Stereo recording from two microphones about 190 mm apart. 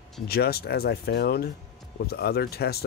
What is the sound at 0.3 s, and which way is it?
Speech, 55° left (ahead or behind).